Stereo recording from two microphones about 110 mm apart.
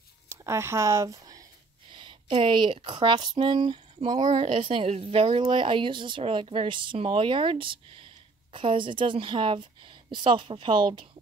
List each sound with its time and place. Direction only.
0.3 s speech: 25° right (ahead or behind)
2.0 s speech: 50° right (ahead or behind)
5.4 s speech: 50° right (ahead or behind)